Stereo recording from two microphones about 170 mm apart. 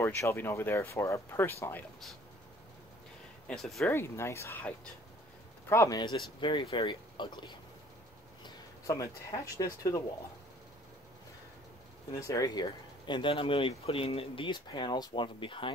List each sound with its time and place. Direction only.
0.0 s speech: 15° left (ahead or behind)
3.4 s speech: centre (ahead or behind)
3.9 s speech: 15° left (ahead or behind)
8.8 s speech: 20° left (ahead or behind)
12.2 s speech: 20° left (ahead or behind)